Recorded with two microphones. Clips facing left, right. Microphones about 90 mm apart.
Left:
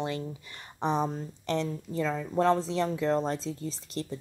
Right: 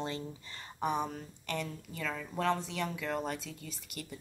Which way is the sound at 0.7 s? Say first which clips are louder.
Left 5 dB; 30° left (ahead or behind).